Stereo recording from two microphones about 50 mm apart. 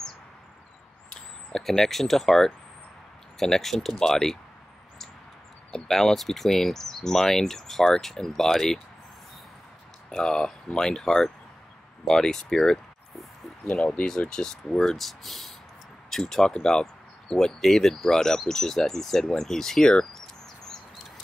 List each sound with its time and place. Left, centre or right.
1.1 s speech: centre
5.7 s speech: centre
10.2 s speech: centre
13.7 s speech: left